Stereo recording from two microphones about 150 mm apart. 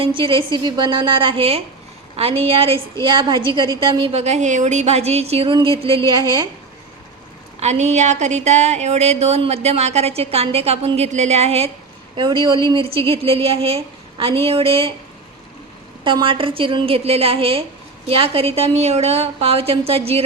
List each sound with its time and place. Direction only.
0.0 s a woman's voice: 35° right (ahead or behind)
7.6 s speech: 50° right (ahead or behind)
12.1 s a woman's voice: 35° right (ahead or behind)
16.0 s a woman's voice: 35° right (ahead or behind)